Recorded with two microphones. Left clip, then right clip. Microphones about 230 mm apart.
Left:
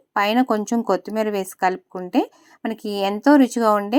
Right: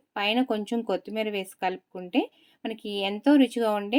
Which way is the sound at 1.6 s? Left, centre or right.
Centre.